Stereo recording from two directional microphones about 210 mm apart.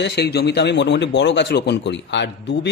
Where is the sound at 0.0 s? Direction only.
50° left (ahead or behind).